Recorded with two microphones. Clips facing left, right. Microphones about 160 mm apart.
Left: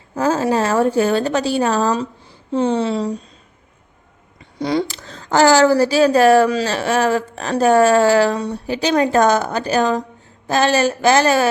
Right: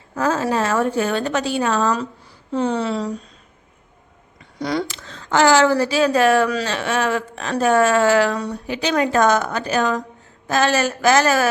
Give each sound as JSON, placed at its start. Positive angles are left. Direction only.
{"t": 0.2, "sound": "speech", "side_deg": 30}
{"t": 4.6, "sound": "speech", "side_deg": 25}
{"t": 4.9, "sound": "speech", "side_deg": 40}